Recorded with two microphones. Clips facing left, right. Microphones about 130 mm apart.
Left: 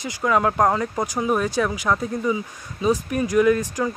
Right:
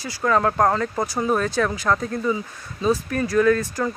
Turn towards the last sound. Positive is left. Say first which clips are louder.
# even
turn(degrees=15)  # may be behind; listen again after turning